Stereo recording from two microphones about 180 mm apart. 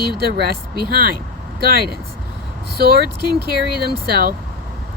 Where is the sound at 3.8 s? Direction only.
60° right (ahead or behind).